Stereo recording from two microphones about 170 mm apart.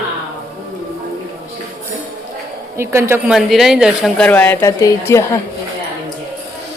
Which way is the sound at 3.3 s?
Centre (ahead or behind).